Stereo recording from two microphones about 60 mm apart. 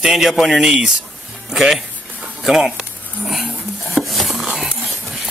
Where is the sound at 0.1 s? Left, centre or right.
Centre.